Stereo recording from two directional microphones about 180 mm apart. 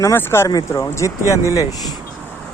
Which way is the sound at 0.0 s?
15° left (ahead or behind).